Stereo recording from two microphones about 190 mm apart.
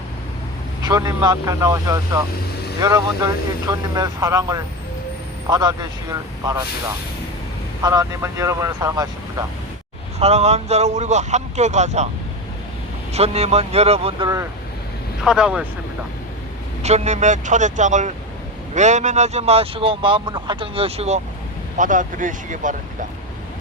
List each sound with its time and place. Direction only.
0.9 s speech: 20° right (ahead or behind)
7.8 s speech: 20° right (ahead or behind)
10.2 s speech: 35° right (ahead or behind)
13.1 s speech: 35° right (ahead or behind)
15.2 s speech: 5° right (ahead or behind)
16.8 s speech: 35° right (ahead or behind)